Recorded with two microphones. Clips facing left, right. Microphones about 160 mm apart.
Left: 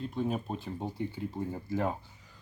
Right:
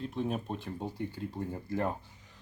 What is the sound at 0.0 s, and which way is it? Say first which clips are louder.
Speech: left 1 dB; centre (ahead or behind).